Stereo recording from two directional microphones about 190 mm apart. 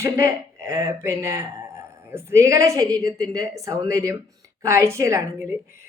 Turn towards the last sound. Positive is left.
turn(degrees=-15)  # may be behind; listen again after turning